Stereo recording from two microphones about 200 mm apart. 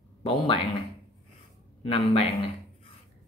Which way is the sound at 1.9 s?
30° left (ahead or behind).